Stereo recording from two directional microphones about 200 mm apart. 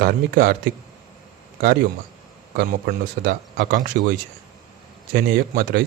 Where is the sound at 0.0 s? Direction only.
50° right (ahead or behind).